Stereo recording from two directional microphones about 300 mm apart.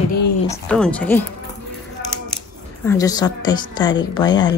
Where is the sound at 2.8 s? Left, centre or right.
Centre.